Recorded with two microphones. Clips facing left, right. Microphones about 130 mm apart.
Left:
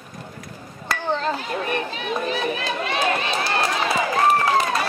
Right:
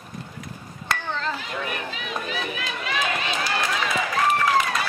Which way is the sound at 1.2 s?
40° left (ahead or behind).